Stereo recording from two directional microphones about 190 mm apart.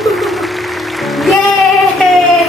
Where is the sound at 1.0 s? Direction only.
Centre (ahead or behind).